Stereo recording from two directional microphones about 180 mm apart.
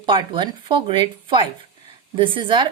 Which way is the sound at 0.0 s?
25° right (ahead or behind).